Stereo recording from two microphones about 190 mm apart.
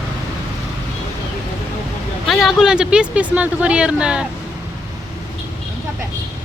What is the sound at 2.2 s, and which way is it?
Speech, centre (ahead or behind).